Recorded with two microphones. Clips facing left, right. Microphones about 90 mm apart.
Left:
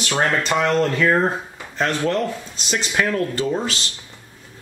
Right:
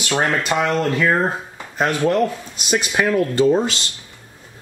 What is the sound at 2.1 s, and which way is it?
Speech, 15° right (ahead or behind).